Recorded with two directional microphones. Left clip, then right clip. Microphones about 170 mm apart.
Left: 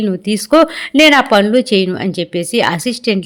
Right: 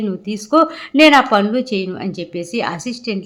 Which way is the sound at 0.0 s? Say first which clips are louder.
Left 6 dB; 25° left (ahead or behind).